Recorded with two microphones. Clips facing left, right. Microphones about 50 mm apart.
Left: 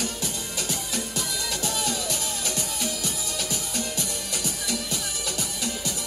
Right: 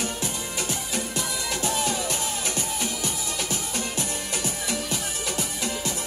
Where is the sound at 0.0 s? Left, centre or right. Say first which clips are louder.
Right 1 dB; right.